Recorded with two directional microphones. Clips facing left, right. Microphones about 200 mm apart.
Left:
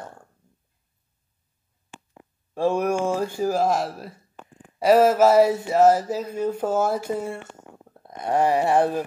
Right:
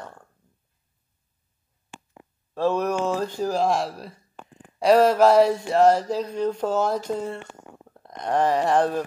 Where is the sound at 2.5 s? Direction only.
10° left (ahead or behind).